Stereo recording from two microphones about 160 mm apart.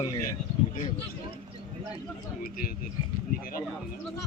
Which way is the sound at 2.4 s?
65° left (ahead or behind).